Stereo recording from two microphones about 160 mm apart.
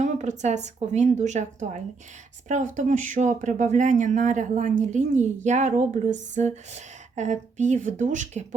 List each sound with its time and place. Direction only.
0.0 s speech: 45° right (ahead or behind)